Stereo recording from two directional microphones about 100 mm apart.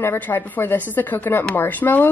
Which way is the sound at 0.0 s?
25° left (ahead or behind).